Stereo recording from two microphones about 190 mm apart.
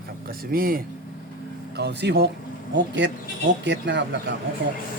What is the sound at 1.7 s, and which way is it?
Speech, 60° right (ahead or behind).